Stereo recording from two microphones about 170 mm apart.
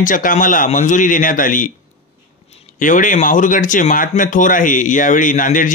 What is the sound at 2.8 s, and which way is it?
Speech, 50° left (ahead or behind).